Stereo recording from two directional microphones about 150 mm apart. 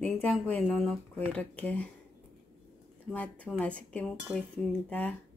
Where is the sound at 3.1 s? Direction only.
10° left (ahead or behind).